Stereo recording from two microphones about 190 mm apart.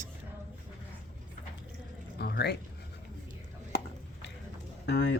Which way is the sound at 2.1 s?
60° left (ahead or behind).